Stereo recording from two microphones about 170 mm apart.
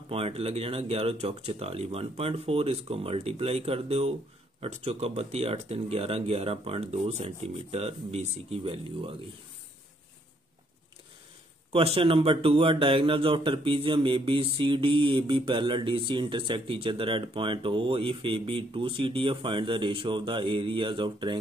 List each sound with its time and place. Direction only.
0.1 s a man's voice: 35° right (ahead or behind)
11.7 s a man's voice: 35° right (ahead or behind)